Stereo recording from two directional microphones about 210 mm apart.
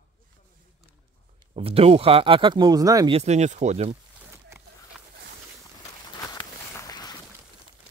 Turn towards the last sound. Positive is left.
turn(degrees=20)  # may be behind; listen again after turning